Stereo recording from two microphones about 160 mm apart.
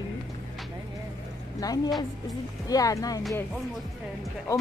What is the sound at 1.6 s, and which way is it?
Speech, 25° left (ahead or behind).